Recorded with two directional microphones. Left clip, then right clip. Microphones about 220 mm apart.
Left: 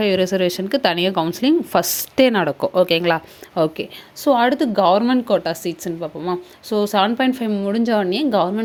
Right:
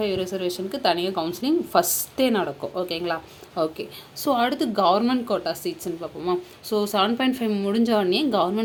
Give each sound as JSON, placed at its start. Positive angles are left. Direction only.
{"t": 0.0, "sound": "speech", "side_deg": 40}